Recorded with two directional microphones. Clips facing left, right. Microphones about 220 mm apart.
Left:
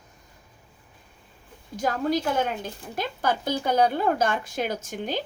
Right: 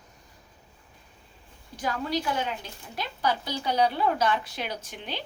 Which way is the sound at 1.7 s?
45° left (ahead or behind).